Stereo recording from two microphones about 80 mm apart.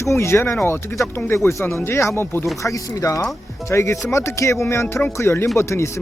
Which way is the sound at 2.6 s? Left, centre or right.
Left.